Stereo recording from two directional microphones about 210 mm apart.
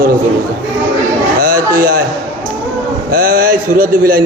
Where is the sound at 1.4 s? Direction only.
40° right (ahead or behind).